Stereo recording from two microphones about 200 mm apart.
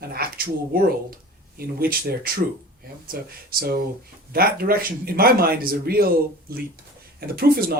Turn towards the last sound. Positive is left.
turn(degrees=-50)  # may be behind; listen again after turning